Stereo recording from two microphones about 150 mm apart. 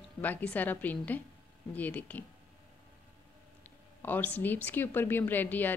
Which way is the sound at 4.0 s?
10° left (ahead or behind).